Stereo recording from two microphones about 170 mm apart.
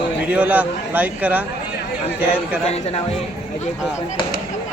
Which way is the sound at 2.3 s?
35° left (ahead or behind).